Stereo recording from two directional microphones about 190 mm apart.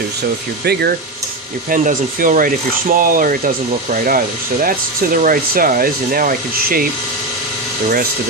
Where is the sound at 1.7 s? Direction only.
45° right (ahead or behind).